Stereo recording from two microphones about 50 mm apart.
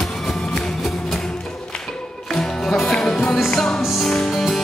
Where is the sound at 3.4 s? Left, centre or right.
Centre.